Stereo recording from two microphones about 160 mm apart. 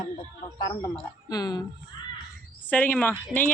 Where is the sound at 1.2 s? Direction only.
25° left (ahead or behind).